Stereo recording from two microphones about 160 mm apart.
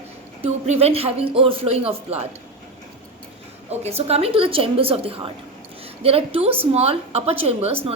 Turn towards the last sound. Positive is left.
turn(degrees=-40)  # may be behind; listen again after turning